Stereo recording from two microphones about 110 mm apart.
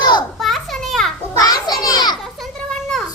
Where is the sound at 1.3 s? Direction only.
35° left (ahead or behind).